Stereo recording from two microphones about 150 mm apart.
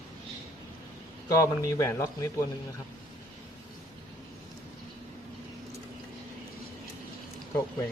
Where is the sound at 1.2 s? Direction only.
20° left (ahead or behind).